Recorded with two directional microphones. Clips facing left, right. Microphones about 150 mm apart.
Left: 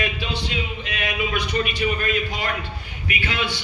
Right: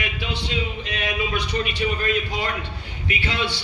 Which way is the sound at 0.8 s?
30° right (ahead or behind).